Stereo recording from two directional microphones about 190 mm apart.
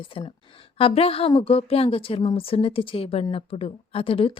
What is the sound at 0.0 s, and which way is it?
A woman's voice, 30° left (ahead or behind).